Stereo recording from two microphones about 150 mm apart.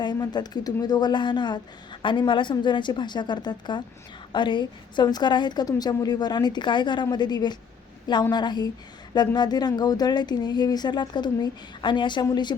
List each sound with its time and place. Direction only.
0.0 s a woman's voice: 30° left (ahead or behind)